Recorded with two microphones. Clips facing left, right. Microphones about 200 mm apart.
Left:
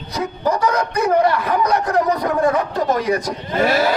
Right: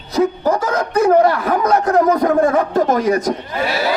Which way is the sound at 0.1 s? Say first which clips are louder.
Right 5 dB; 50° right (ahead or behind).